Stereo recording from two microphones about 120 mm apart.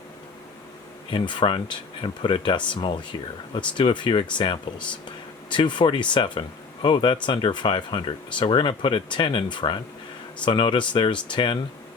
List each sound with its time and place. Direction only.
1.1 s speech: 40° left (ahead or behind)